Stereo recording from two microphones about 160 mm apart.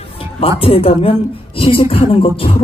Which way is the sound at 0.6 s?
35° left (ahead or behind).